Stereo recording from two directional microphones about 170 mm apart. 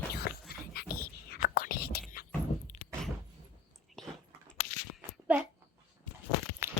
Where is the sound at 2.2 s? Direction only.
65° left (ahead or behind).